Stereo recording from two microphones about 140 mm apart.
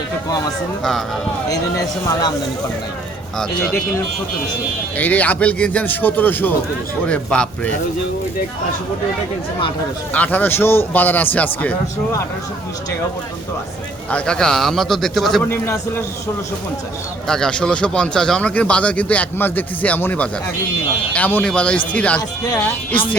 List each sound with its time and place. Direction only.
4.9 s speech: 10° left (ahead or behind)
10.1 s speech: 10° left (ahead or behind)
14.1 s a man's voice: 5° left (ahead or behind)
15.4 s speech: 15° left (ahead or behind)
17.2 s speech: 5° left (ahead or behind)